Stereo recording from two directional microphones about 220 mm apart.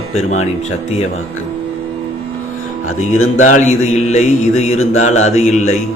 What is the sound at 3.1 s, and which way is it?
Speech, 70° left (ahead or behind).